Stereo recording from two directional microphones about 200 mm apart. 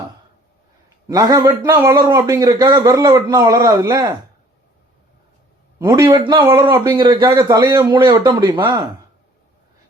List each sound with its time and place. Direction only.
1.0 s speech: 20° right (ahead or behind)
5.8 s speech: 20° right (ahead or behind)